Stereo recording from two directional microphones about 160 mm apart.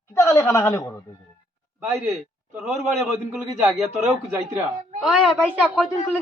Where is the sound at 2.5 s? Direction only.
15° right (ahead or behind).